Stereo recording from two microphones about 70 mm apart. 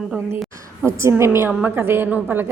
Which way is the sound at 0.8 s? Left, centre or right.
Right.